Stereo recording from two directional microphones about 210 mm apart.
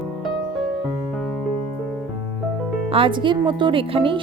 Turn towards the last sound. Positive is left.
turn(degrees=-25)  # may be behind; listen again after turning